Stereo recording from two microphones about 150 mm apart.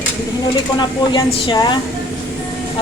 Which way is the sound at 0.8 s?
30° left (ahead or behind).